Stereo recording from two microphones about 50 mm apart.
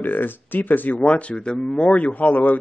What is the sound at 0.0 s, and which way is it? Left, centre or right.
Speech, left.